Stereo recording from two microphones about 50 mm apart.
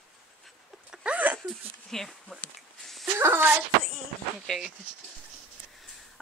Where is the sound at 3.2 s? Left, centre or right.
Right.